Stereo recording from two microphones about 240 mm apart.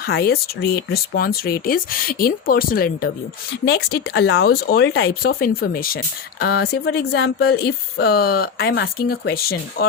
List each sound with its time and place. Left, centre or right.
0.0 s speech: left